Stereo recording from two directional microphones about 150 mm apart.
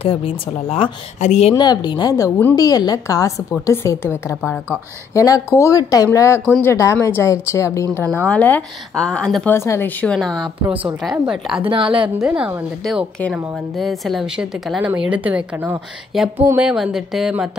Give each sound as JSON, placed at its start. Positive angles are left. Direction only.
{"t": 0.0, "sound": "speech", "side_deg": 40}
{"t": 1.2, "sound": "speech", "side_deg": 50}
{"t": 1.5, "sound": "a woman's voice", "side_deg": 30}
{"t": 9.5, "sound": "speech", "side_deg": 15}
{"t": 11.6, "sound": "a woman's voice", "side_deg": -35}
{"t": 12.2, "sound": "a woman's voice", "side_deg": -10}
{"t": 12.8, "sound": "a woman's voice", "side_deg": 0}
{"t": 16.1, "sound": "speech", "side_deg": 0}